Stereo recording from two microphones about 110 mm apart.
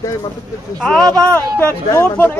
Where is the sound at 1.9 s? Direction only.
20° left (ahead or behind).